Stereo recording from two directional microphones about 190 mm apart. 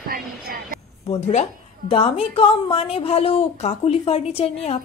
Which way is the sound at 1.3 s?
35° left (ahead or behind).